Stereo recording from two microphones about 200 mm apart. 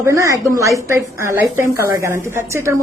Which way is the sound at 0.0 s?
15° right (ahead or behind).